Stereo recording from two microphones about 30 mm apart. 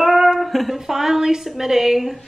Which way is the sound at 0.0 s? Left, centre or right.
Centre.